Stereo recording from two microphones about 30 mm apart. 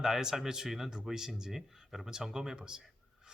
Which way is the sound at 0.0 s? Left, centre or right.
Centre.